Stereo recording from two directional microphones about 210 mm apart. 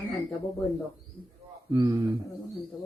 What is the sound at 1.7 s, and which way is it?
Speech, 15° right (ahead or behind).